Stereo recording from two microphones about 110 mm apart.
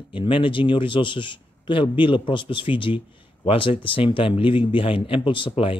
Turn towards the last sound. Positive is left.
turn(degrees=55)  # may be behind; listen again after turning